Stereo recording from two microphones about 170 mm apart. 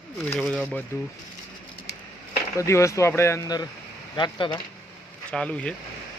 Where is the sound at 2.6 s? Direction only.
15° left (ahead or behind).